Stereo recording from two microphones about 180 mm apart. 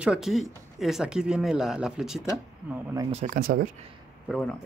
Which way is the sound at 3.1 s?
45° right (ahead or behind).